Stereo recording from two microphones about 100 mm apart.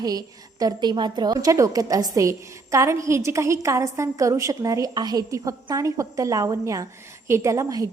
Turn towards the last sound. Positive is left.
turn(degrees=-35)  # may be behind; listen again after turning